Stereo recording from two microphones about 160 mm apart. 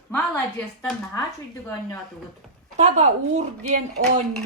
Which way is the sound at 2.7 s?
45° right (ahead or behind).